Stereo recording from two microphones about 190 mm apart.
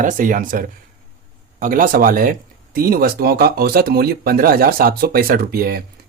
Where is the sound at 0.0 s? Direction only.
45° right (ahead or behind).